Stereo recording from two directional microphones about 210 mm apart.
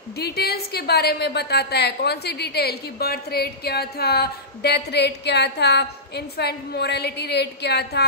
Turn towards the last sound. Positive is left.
turn(degrees=50)  # may be behind; listen again after turning